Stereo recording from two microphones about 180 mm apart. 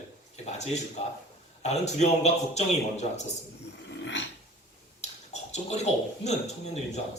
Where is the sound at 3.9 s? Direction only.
75° left (ahead or behind).